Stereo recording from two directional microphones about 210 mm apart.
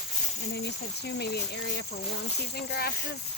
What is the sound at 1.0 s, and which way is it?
Speech, 50° left (ahead or behind).